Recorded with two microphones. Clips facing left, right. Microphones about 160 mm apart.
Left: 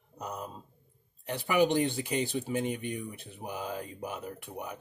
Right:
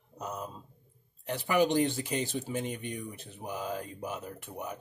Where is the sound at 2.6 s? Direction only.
10° left (ahead or behind).